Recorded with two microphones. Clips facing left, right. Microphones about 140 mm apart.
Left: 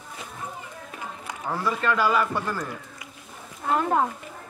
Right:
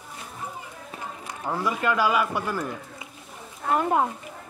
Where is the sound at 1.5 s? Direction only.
15° right (ahead or behind).